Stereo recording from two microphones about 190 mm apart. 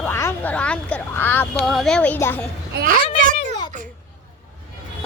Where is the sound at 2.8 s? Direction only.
50° right (ahead or behind).